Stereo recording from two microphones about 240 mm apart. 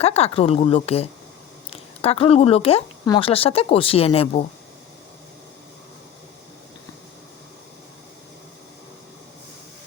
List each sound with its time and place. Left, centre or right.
0.0 s speech: left